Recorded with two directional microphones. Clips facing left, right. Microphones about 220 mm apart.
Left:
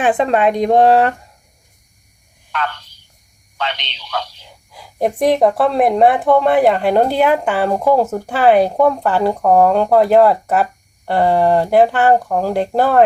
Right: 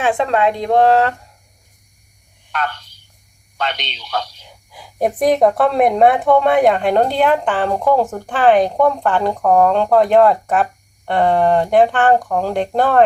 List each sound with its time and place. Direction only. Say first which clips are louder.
0.0 s a woman's voice: left 2 dB; 15° left (ahead or behind)
3.6 s speech: right 1 dB; 45° right (ahead or behind)
4.4 s a woman's voice: even; centre (ahead or behind)